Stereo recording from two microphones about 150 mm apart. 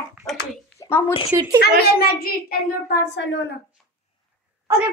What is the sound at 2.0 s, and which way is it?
Speech, 85° left.